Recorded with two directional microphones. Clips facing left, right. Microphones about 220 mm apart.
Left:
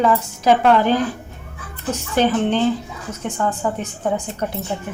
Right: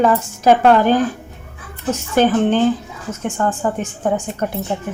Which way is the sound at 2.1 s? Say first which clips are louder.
Right 3 dB; 50° right (ahead or behind).